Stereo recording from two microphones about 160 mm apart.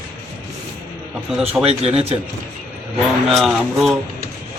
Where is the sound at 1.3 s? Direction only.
5° right (ahead or behind).